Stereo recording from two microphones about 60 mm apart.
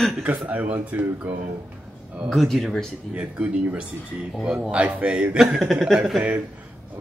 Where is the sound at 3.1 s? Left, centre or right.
Right.